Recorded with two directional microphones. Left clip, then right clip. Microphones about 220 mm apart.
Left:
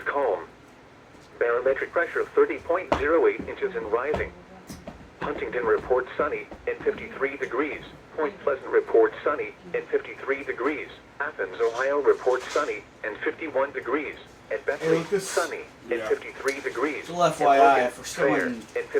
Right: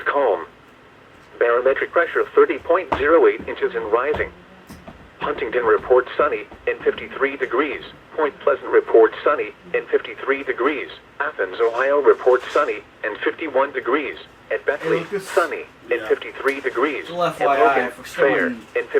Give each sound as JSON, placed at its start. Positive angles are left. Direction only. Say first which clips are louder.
{"t": 0.0, "sound": "radio", "louder": "right 7 dB", "side_deg": -40}
{"t": 1.4, "sound": "speech", "louder": "right 6 dB", "side_deg": -45}
{"t": 18.2, "sound": "speech", "louder": "right 6 dB", "side_deg": -45}